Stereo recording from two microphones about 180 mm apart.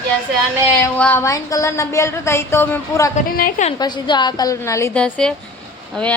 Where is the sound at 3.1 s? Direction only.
50° left (ahead or behind).